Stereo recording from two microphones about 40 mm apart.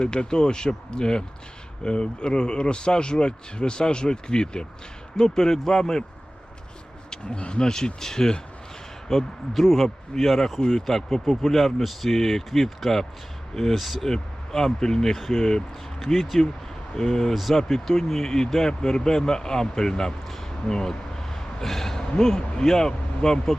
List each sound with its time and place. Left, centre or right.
0.0 s speech: left
7.1 s speech: left
17.3 s speech: centre